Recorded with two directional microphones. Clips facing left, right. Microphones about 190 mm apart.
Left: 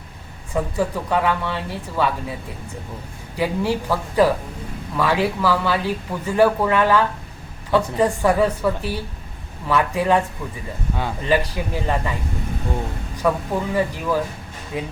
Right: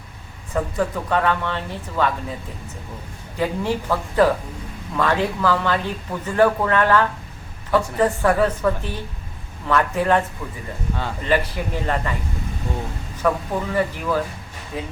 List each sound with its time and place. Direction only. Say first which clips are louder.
0.5 s speech: even; 10° left (ahead or behind)
3.3 s speech: left 1 dB; 10° left (ahead or behind)
13.2 s speech: left 1 dB; 10° left (ahead or behind)